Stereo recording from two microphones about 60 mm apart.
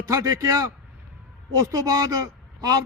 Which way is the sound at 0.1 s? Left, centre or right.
Right.